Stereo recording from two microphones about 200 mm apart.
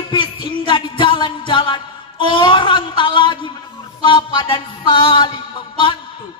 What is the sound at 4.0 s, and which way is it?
Music, 20° left (ahead or behind).